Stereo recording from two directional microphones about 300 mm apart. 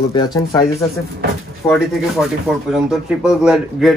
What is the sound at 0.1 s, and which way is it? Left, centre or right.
Speech, centre.